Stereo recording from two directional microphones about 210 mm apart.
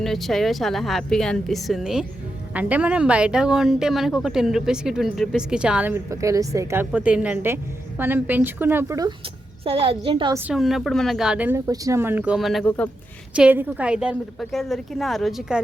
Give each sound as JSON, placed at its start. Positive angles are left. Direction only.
{"t": 0.0, "sound": "speech", "side_deg": 0}
{"t": 9.6, "sound": "a child's voice", "side_deg": -25}
{"t": 10.3, "sound": "speech", "side_deg": -5}
{"t": 13.3, "sound": "speech", "side_deg": -5}